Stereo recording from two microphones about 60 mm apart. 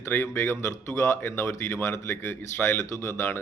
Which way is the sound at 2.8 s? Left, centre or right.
Left.